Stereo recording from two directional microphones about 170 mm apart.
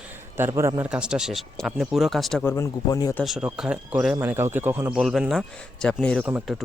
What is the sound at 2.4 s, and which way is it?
Speech, 15° left (ahead or behind).